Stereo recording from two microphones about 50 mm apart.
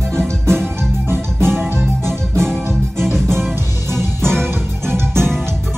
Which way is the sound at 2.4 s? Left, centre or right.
Centre.